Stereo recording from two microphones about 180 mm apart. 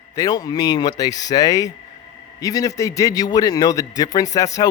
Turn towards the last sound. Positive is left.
turn(degrees=20)  # may be behind; listen again after turning